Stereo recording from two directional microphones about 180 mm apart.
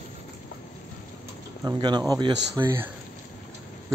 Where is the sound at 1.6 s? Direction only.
20° right (ahead or behind).